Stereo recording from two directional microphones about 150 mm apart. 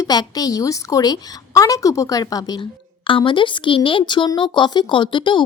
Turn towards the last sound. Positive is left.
turn(degrees=35)  # may be behind; listen again after turning